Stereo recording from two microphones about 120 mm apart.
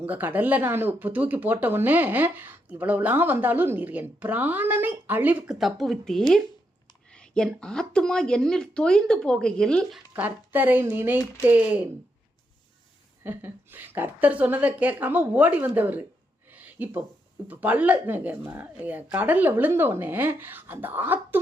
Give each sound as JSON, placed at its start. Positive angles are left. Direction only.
{"t": 0.1, "sound": "speech", "side_deg": -15}
{"t": 5.5, "sound": "a woman's voice", "side_deg": 0}
{"t": 10.1, "sound": "speech", "side_deg": -15}
{"t": 13.2, "sound": "speech", "side_deg": -15}
{"t": 16.5, "sound": "a sound", "side_deg": -15}
{"t": 17.5, "sound": "speech", "side_deg": -15}